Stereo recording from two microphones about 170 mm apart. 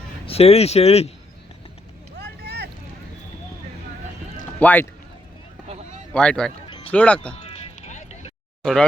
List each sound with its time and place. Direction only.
0.3 s speech: 35° left (ahead or behind)
2.1 s vehicle: 75° right (ahead or behind)
4.6 s speech: 10° left (ahead or behind)
6.1 s speech: 5° left (ahead or behind)
7.3 s music: 40° left (ahead or behind)
8.6 s speech: 5° left (ahead or behind)